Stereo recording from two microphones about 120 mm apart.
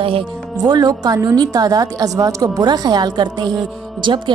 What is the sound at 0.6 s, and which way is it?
A woman's voice, 35° right (ahead or behind).